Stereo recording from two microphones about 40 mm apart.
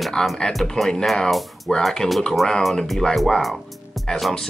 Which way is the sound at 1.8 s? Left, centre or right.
Centre.